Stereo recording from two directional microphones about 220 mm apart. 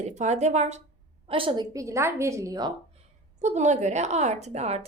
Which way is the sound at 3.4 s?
30° right (ahead or behind).